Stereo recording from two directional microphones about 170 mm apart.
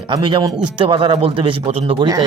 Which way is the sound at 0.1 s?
25° right (ahead or behind).